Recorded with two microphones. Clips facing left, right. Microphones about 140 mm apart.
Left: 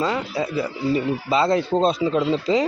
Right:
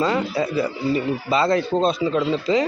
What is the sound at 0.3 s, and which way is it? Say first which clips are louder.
Speech: right 2 dB; 15° left (ahead or behind).